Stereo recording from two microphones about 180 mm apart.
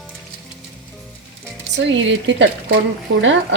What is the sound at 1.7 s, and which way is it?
Speech, 90° right.